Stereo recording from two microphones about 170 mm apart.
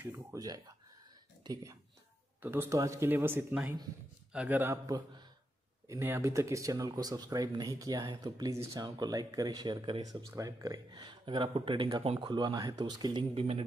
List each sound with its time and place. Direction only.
0.0 s speech: 15° right (ahead or behind); by 13.7 s 35° right (ahead or behind)